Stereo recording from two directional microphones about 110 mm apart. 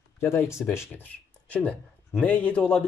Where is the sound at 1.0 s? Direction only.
10° left (ahead or behind).